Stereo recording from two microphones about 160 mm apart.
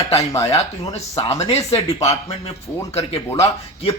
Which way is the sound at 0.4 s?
40° left (ahead or behind).